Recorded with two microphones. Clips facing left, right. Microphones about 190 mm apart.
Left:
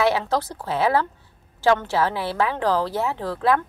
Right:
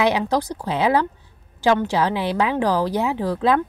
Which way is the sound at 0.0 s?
15° right (ahead or behind).